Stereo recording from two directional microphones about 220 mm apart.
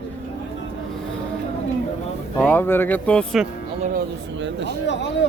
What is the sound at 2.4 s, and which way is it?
Speech, 5° left (ahead or behind).